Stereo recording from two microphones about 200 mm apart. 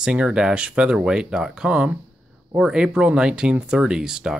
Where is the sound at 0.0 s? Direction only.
5° right (ahead or behind).